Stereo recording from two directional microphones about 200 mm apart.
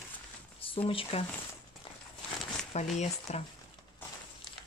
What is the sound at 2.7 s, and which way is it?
Speech, 35° left (ahead or behind).